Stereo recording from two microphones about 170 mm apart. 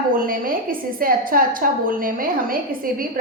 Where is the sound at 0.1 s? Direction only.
55° right (ahead or behind).